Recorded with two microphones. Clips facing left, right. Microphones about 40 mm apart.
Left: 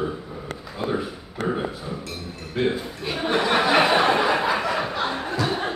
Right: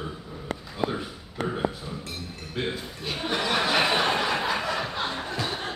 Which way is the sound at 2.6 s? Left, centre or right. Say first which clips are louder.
Left 7 dB; centre.